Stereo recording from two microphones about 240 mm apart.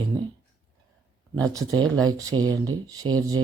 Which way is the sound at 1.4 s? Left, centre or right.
Centre.